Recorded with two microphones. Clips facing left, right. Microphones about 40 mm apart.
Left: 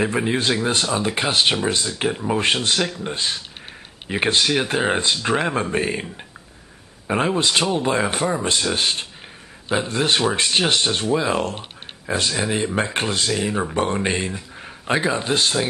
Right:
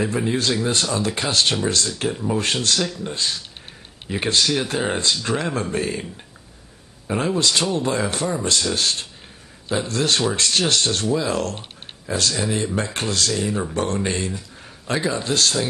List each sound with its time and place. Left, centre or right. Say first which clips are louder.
0.0 s speech: left 1 dB; left